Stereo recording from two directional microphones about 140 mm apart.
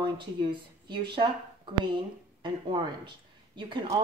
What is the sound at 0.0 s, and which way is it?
Speech, 35° right (ahead or behind).